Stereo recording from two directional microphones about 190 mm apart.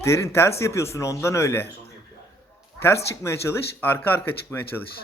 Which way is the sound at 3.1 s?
15° left (ahead or behind).